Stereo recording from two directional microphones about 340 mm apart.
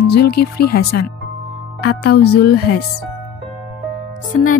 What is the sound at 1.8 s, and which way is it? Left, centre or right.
Speech, left.